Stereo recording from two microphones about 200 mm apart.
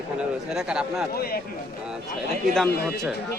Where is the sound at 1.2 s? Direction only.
50° left (ahead or behind).